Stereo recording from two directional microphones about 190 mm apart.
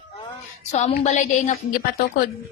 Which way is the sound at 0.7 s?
35° left (ahead or behind).